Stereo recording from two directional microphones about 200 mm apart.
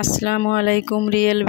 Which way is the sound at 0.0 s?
50° left (ahead or behind).